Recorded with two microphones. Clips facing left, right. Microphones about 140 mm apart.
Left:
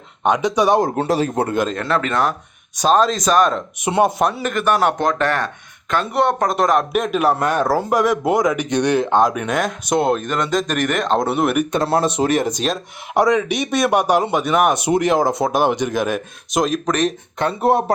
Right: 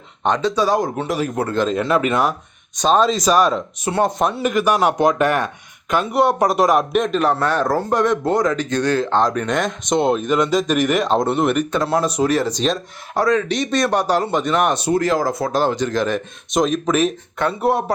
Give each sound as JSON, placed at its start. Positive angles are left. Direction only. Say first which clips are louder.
{"t": 0.2, "sound": "a man's voice", "louder": "left 1 dB", "side_deg": 10}
{"t": 0.8, "sound": "a man's voice", "louder": "left 3 dB", "side_deg": 35}
{"t": 1.7, "sound": "speech", "louder": "right 2 dB", "side_deg": -5}
{"t": 2.7, "sound": "speech", "louder": "even", "side_deg": 0}
{"t": 3.8, "sound": "a man's voice", "louder": "left 4 dB", "side_deg": 15}
{"t": 4.2, "sound": "a man's voice", "louder": "right 1 dB", "side_deg": 0}
{"t": 11.8, "sound": "speech", "louder": "left 1 dB", "side_deg": 30}
{"t": 12.5, "sound": "a man's voice", "louder": "right 2 dB", "side_deg": 10}
{"t": 17.3, "sound": "speech", "louder": "left 3 dB", "side_deg": 25}